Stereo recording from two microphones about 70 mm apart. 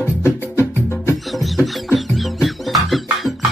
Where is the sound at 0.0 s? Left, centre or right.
Left.